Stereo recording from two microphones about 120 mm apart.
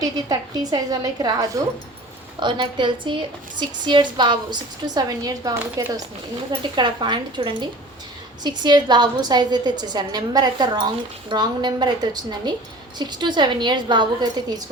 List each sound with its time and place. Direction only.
0.0 s a woman's voice: 35° right (ahead or behind)